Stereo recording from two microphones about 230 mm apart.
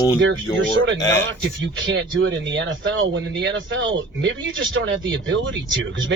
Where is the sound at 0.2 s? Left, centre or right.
Right.